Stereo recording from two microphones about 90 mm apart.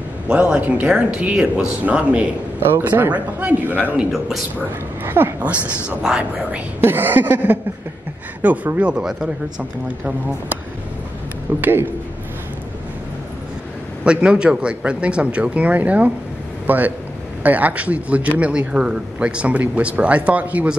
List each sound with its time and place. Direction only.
0.3 s speech: 15° right (ahead or behind)
5.0 s speech: 25° right (ahead or behind)
5.5 s speech: 10° right (ahead or behind)
6.8 s speech: 25° right (ahead or behind)
11.6 s speech: 25° right (ahead or behind)
14.0 s a man's voice: 10° right (ahead or behind)